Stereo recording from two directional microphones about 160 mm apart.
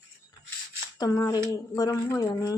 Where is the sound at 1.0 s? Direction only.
25° left (ahead or behind).